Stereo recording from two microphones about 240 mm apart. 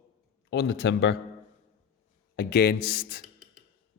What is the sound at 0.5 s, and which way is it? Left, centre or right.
Speech, left.